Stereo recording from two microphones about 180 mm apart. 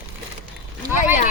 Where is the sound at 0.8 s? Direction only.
10° right (ahead or behind).